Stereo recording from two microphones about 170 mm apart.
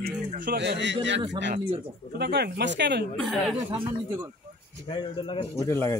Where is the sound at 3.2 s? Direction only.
Centre (ahead or behind).